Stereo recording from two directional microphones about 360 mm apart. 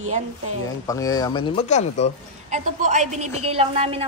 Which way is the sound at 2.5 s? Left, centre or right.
Centre.